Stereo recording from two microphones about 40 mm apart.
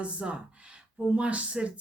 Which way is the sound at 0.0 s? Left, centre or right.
Right.